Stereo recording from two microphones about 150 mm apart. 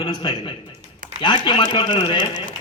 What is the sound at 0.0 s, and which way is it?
A man's voice, 30° left (ahead or behind).